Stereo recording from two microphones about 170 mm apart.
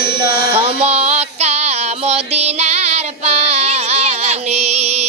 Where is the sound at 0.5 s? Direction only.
35° right (ahead or behind).